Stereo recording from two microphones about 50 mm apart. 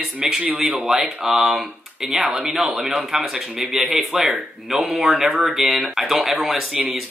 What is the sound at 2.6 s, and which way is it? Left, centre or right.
Speech, right.